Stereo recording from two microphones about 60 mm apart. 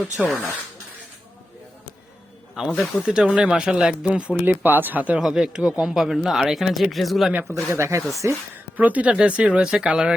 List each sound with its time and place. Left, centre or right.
0.2 s speech: centre
2.7 s speech: centre
3.1 s speech: centre
4.4 s speech: right
5.2 s speech: centre
7.5 s speech: right
8.7 s speech: right